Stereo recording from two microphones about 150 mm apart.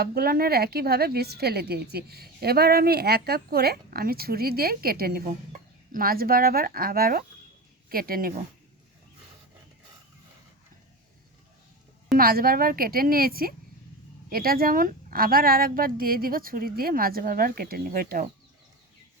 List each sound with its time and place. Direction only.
0.0 s a woman's voice: 90° right
12.1 s speech: 75° right (ahead or behind)